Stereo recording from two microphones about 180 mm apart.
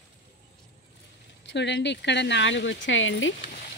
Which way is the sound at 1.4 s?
75° left (ahead or behind).